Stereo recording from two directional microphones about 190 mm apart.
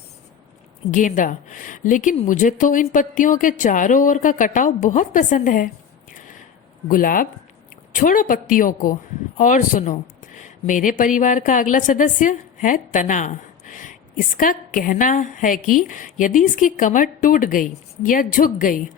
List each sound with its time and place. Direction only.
0.9 s a woman's voice: 40° left (ahead or behind)
6.8 s a woman's voice: 45° left (ahead or behind)